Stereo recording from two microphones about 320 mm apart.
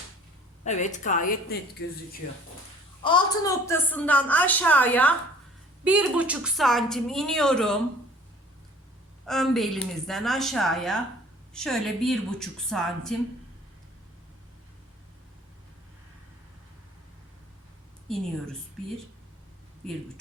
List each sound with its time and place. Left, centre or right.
0.6 s a woman's voice: left
3.0 s a woman's voice: centre
9.2 s a woman's voice: centre
18.1 s a woman's voice: centre